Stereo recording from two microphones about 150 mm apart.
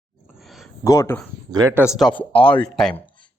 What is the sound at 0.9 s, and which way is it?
Speech, 20° left (ahead or behind).